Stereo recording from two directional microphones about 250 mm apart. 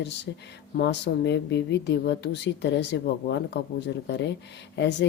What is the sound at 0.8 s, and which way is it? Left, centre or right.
A woman's voice, left.